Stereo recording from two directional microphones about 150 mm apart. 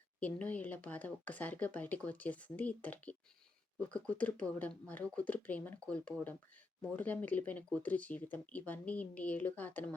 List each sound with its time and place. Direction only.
0.2 s speech: 10° left (ahead or behind)